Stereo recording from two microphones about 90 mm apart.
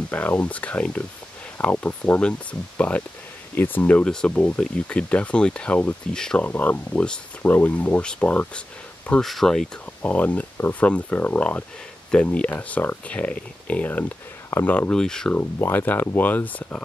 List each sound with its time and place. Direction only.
0.1 s speech: 15° left (ahead or behind)
6.4 s speech: 20° left (ahead or behind)
9.2 s speech: 5° left (ahead or behind)
10.0 s speech: 15° left (ahead or behind)
14.9 s speech: 5° left (ahead or behind)
15.3 s speech: 20° left (ahead or behind)